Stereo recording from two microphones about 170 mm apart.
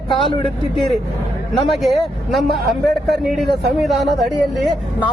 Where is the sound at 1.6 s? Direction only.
Centre (ahead or behind).